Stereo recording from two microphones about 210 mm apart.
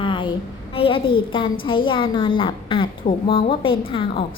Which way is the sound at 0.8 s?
25° left (ahead or behind).